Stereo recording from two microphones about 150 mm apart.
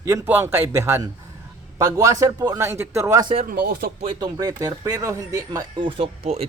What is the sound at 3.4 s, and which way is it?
Speech, 80° right.